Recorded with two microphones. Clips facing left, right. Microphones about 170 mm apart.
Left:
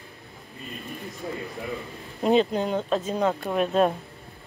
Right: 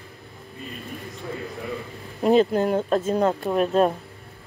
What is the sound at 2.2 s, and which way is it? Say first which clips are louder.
Speech: right 3 dB; 5° right (ahead or behind).